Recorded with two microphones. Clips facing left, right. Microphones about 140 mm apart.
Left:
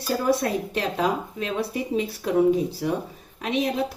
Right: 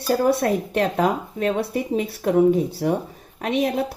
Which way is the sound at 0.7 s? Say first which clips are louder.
Right 4 dB; 55° right (ahead or behind).